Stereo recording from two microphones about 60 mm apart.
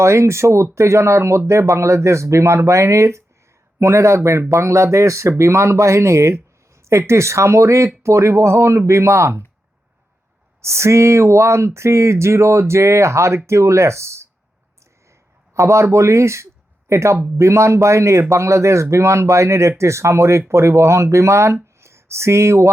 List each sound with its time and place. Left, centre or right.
0.0 s a man's voice: right
10.6 s a man's voice: right
15.5 s a man's voice: right